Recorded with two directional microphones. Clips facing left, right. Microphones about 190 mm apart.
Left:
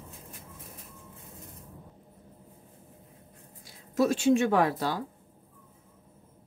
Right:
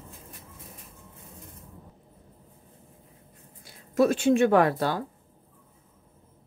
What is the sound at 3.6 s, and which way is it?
Speech, 55° right (ahead or behind).